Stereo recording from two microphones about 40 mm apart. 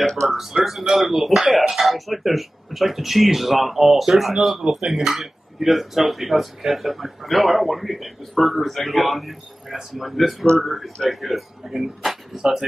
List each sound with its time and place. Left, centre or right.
0.3 s speech: centre
4.6 s speech: centre
4.9 s speech: centre